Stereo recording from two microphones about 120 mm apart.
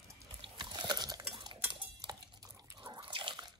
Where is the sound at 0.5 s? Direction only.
40° right (ahead or behind).